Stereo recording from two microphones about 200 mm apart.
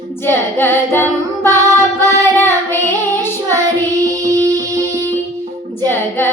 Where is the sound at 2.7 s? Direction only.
10° left (ahead or behind).